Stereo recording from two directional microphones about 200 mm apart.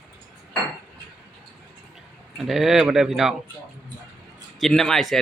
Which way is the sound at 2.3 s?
Centre (ahead or behind).